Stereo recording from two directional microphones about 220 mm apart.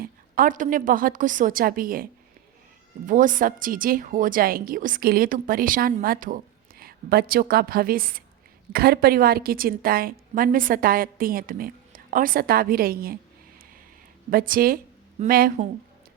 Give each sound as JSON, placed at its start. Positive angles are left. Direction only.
{"t": 0.0, "sound": "a woman's voice", "side_deg": -40}
{"t": 3.1, "sound": "a woman's voice", "side_deg": -35}
{"t": 14.3, "sound": "a woman's voice", "side_deg": -40}